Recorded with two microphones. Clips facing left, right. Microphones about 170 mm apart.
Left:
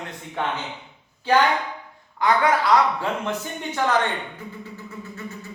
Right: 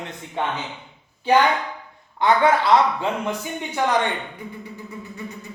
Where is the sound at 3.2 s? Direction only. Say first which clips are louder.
Right 1 dB; 15° right (ahead or behind).